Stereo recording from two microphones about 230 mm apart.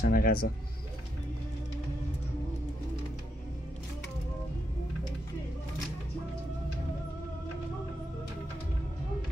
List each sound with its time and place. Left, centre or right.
0.0 s speech: left